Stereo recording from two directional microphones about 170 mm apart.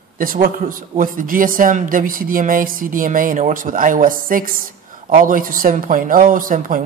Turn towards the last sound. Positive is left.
turn(degrees=-55)  # may be behind; listen again after turning